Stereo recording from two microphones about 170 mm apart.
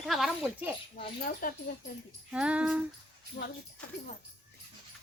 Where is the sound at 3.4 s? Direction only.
60° left (ahead or behind).